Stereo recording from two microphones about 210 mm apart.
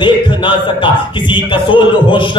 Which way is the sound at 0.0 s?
25° left (ahead or behind).